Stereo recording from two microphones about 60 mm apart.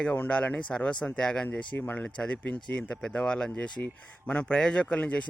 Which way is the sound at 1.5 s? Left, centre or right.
Left.